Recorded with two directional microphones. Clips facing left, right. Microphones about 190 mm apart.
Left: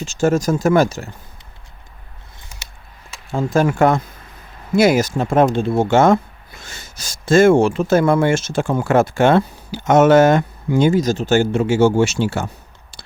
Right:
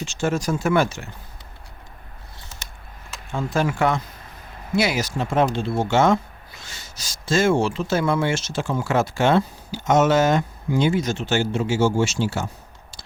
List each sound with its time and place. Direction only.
0.0 s speech: 45° left (ahead or behind)
3.2 s speech: 40° left (ahead or behind); by 12.5 s 60° left (ahead or behind)